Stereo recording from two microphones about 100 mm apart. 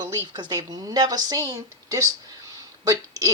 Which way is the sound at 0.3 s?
45° right (ahead or behind).